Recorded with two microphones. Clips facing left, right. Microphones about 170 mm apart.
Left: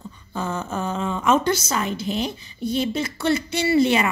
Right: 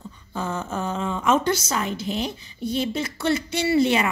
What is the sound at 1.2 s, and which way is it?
Speech, 60° left (ahead or behind).